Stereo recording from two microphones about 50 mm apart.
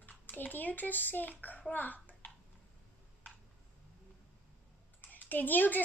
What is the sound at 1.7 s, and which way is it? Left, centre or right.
Bathtub, left.